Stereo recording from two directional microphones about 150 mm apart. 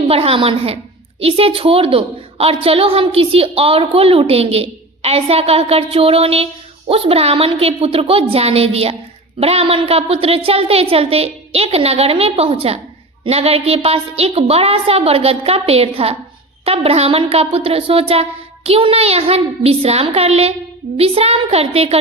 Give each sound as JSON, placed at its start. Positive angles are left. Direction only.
{"t": 0.1, "sound": "a woman's voice", "side_deg": -40}